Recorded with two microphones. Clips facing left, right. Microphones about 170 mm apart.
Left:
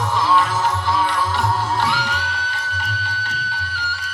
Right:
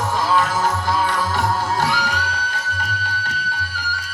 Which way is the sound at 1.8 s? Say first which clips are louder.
Right 1 dB; 45° right (ahead or behind).